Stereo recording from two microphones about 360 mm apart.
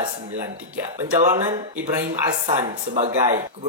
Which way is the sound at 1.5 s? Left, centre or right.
Centre.